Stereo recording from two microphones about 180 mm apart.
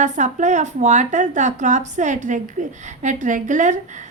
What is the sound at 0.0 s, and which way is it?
A woman's voice, 40° right (ahead or behind).